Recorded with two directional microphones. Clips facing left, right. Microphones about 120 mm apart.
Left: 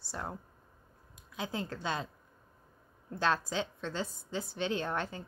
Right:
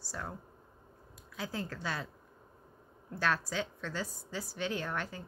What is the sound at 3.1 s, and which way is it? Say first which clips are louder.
Speech: left 2 dB; 20° left (ahead or behind).